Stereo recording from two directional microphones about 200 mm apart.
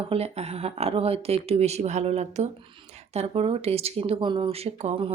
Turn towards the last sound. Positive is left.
turn(degrees=-35)  # may be behind; listen again after turning